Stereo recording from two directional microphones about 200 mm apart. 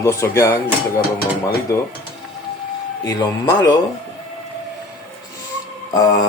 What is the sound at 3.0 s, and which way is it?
Speech, 20° left (ahead or behind).